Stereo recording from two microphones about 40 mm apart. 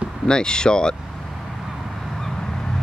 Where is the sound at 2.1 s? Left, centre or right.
Centre.